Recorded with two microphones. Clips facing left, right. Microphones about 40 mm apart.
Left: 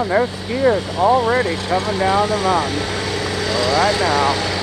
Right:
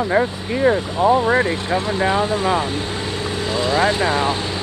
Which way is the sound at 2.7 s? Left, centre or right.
Left.